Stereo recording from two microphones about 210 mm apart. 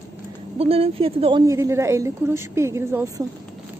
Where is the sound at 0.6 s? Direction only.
25° right (ahead or behind).